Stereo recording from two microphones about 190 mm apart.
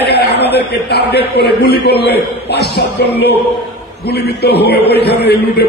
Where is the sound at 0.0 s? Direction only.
60° left (ahead or behind).